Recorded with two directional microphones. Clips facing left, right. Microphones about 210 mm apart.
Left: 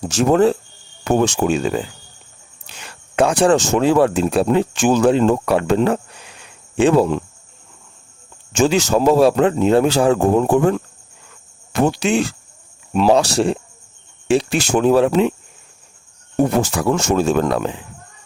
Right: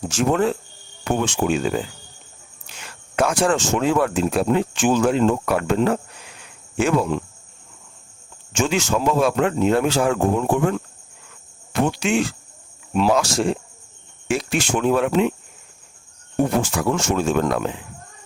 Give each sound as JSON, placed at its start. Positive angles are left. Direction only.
{"t": 0.1, "sound": "speech", "side_deg": 35}
{"t": 8.5, "sound": "speech", "side_deg": 35}
{"t": 16.6, "sound": "speech", "side_deg": 35}